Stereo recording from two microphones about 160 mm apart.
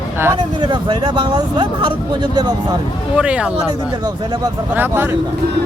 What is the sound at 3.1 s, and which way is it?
Speech, 5° right (ahead or behind).